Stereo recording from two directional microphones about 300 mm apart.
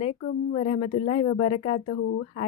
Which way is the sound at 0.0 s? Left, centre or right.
Centre.